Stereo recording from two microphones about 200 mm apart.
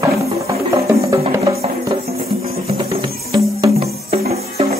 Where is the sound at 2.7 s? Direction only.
30° right (ahead or behind).